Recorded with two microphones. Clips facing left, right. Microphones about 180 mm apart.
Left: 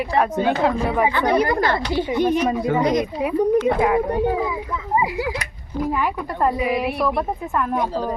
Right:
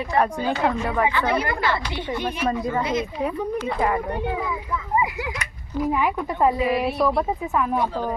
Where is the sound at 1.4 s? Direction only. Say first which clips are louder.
Left 5 dB; 40° left (ahead or behind).